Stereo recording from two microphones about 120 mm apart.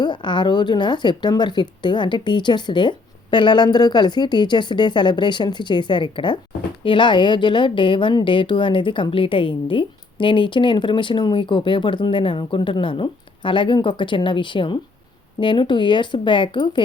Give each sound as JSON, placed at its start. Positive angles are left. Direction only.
{"t": 0.0, "sound": "a woman's voice", "side_deg": 40}